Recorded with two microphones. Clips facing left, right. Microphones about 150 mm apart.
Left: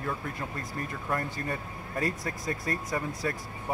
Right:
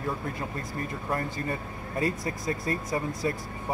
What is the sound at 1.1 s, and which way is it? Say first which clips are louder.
Speech: right 1 dB; 25° right (ahead or behind).